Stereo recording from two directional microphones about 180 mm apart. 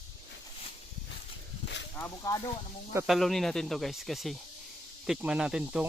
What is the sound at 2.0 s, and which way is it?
Speech, 15° left (ahead or behind).